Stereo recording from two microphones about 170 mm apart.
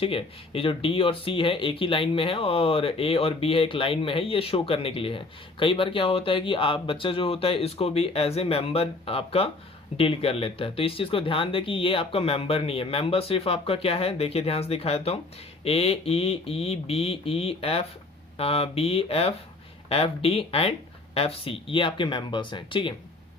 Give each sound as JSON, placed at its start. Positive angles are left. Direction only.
{"t": 0.0, "sound": "speech", "side_deg": 35}